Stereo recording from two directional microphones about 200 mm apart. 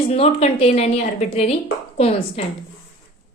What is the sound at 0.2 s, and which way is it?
A woman's voice, 30° left (ahead or behind).